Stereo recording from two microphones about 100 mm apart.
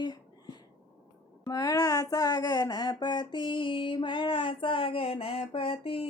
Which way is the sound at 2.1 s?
40° left (ahead or behind).